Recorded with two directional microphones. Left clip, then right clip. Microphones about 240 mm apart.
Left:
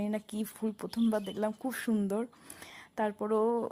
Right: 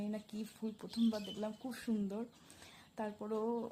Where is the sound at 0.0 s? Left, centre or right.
Left.